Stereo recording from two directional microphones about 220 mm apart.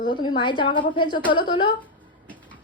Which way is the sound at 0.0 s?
20° left (ahead or behind).